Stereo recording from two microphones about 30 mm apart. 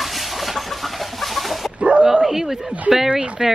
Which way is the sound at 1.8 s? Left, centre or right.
Right.